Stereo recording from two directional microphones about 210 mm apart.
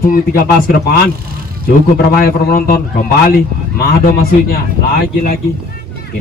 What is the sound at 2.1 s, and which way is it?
Speech, 45° left (ahead or behind).